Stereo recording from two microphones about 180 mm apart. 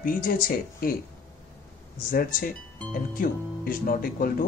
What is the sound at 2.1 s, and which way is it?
Speech, 55° left (ahead or behind).